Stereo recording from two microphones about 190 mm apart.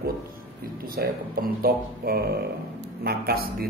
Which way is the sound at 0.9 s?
50° right (ahead or behind).